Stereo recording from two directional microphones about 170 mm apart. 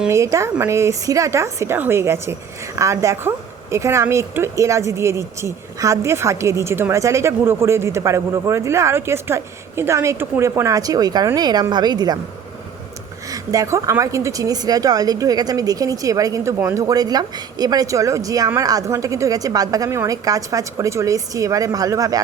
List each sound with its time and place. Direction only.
0.1 s a woman's voice: 15° right (ahead or behind)
13.3 s a woman's voice: 20° right (ahead or behind)